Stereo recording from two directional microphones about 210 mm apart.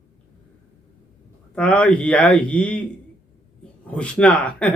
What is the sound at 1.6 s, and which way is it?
Speech, 5° left (ahead or behind).